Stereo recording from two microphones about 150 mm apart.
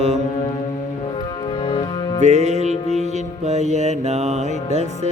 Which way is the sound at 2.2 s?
50° right (ahead or behind).